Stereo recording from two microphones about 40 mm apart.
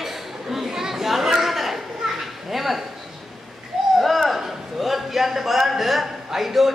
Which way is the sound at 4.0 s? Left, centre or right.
Centre.